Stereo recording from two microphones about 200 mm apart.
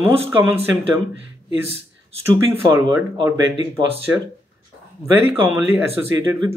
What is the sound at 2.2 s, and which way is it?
Speech, 15° right (ahead or behind).